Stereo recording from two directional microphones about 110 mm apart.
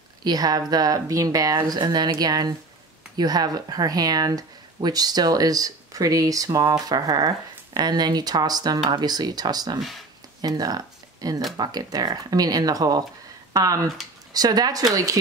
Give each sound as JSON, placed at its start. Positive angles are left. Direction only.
{"t": 0.2, "sound": "speech", "side_deg": -35}
{"t": 9.8, "sound": "speech", "side_deg": 0}
{"t": 10.4, "sound": "speech", "side_deg": -35}